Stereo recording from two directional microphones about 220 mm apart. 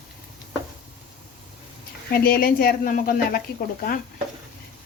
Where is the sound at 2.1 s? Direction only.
45° left (ahead or behind).